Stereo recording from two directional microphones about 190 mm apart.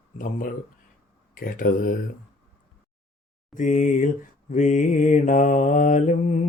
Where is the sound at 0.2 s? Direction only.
45° left (ahead or behind).